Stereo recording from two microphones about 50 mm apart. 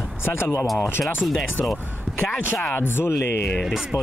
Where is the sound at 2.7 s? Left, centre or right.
Left.